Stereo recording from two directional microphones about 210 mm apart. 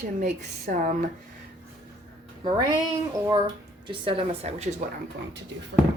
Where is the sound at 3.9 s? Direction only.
25° right (ahead or behind).